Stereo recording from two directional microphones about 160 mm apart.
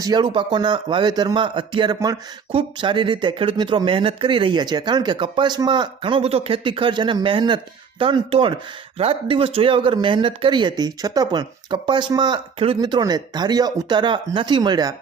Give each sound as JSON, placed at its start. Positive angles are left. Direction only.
{"t": 0.0, "sound": "speech", "side_deg": -25}